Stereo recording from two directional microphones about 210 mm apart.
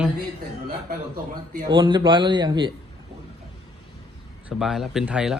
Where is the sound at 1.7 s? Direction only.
20° right (ahead or behind).